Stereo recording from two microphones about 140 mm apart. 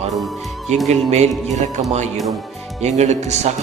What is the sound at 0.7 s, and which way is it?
A man's voice, 55° right (ahead or behind).